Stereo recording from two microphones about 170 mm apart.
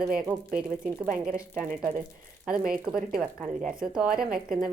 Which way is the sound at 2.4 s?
5° right (ahead or behind).